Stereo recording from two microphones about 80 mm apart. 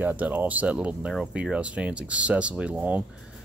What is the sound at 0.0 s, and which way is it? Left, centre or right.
Speech, centre.